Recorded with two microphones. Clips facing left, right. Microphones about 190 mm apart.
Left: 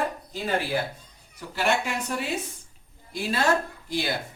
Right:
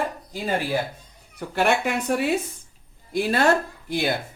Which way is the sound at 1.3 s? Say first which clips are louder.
Right 4 dB; 60° right (ahead or behind).